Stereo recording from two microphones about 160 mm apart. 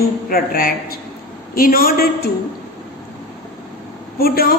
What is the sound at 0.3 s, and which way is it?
A woman's voice, 65° left (ahead or behind).